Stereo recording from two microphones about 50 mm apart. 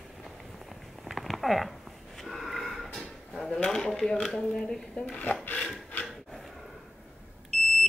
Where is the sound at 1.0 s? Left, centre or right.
Centre.